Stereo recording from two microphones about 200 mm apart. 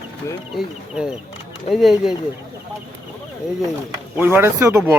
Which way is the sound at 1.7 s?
Centre (ahead or behind).